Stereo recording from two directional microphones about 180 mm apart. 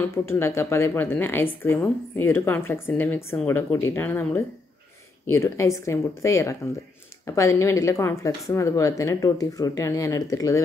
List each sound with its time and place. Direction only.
0.1 s speech: 15° left (ahead or behind)